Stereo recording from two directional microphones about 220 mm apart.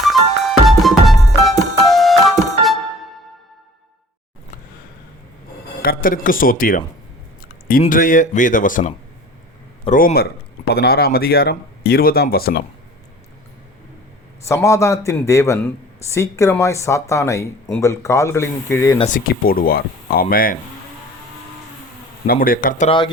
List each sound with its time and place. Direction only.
0.0 s music: centre (ahead or behind)
5.8 s speech: 40° left (ahead or behind)
14.4 s speech: 15° left (ahead or behind)
18.9 s speech: 35° left (ahead or behind)
22.3 s speech: 40° left (ahead or behind)